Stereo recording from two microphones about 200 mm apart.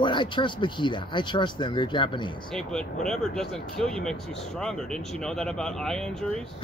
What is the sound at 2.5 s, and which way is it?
Speech, 5° left (ahead or behind).